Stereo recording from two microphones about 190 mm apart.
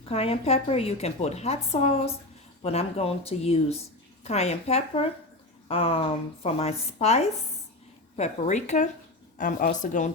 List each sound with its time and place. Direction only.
0.1 s a woman's voice: 30° left (ahead or behind)